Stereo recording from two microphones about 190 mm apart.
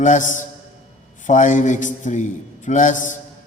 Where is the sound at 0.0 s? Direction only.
40° left (ahead or behind).